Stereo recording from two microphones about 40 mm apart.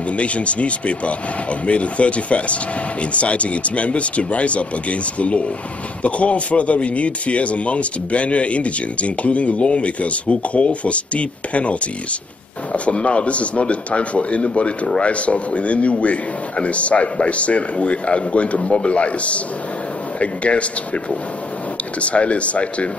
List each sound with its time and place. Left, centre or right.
0.1 s a man's voice: left
12.7 s a man's voice: left
22.0 s a man's voice: left